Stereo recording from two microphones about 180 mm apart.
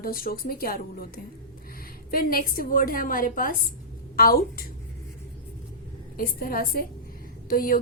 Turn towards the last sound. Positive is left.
turn(degrees=50)  # may be behind; listen again after turning